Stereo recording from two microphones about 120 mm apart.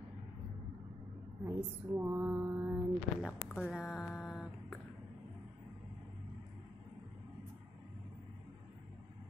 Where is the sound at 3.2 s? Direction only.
5° right (ahead or behind).